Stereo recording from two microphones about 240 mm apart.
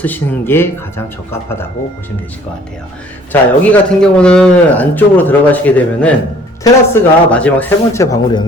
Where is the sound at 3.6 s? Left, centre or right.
Centre.